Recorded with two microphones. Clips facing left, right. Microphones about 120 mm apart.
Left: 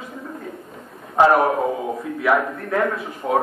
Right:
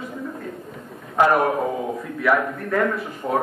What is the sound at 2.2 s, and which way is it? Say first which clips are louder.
A man's voice: left 1 dB; 10° left (ahead or behind).